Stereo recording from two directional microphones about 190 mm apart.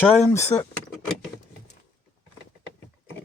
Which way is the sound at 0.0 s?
10° left (ahead or behind).